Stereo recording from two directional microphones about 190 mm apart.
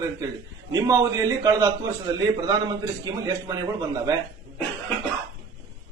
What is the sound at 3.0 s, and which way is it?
Speech, 20° right (ahead or behind).